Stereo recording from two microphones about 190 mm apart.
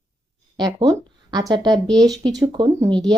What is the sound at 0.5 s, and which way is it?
Speech, 20° right (ahead or behind).